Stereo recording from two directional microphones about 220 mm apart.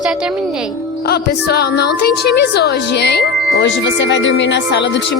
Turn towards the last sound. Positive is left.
turn(degrees=55)  # may be behind; listen again after turning